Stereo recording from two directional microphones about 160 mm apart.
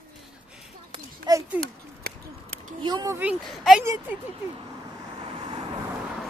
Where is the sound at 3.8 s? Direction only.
15° right (ahead or behind).